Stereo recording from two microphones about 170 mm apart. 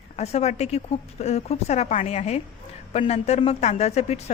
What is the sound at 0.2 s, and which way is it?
Speech, 40° left (ahead or behind).